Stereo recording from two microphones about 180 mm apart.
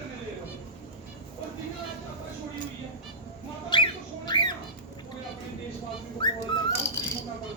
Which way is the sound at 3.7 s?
25° left (ahead or behind).